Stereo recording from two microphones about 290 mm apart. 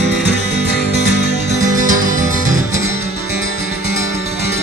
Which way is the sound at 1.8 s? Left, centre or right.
Right.